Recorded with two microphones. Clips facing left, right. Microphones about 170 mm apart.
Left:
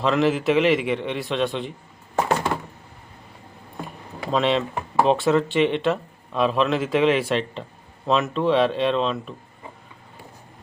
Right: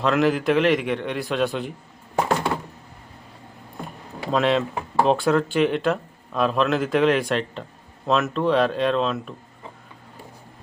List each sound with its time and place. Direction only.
0.0 s speech: centre (ahead or behind)
4.3 s speech: centre (ahead or behind)